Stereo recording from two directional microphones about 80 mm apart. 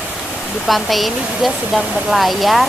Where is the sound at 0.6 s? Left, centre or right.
Centre.